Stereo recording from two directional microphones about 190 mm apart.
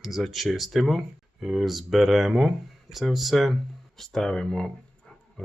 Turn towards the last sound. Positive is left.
turn(degrees=5)  # may be behind; listen again after turning